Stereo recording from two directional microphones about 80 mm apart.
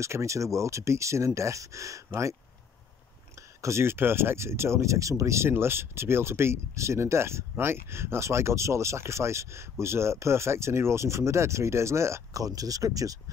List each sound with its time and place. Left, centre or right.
0.0 s speech: right
3.3 s speech: right
12.4 s speech: right